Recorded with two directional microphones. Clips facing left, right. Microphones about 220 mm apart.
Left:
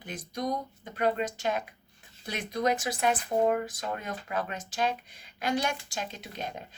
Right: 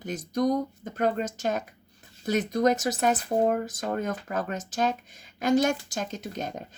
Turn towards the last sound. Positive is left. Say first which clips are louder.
# right 5 dB
turn(degrees=-45)  # may be behind; listen again after turning